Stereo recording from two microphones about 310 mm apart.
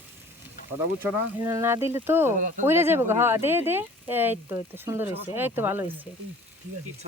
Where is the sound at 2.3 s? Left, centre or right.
Right.